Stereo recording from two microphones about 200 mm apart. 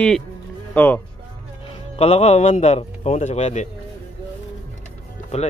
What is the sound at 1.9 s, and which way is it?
A man's voice, 30° left (ahead or behind).